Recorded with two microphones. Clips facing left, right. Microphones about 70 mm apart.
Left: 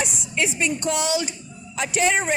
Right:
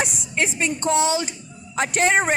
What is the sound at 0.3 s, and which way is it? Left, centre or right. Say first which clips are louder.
Speech: even; right.